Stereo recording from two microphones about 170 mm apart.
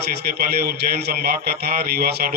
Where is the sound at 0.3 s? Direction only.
65° right (ahead or behind).